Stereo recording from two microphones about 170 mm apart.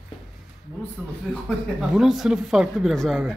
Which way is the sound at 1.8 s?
Centre (ahead or behind).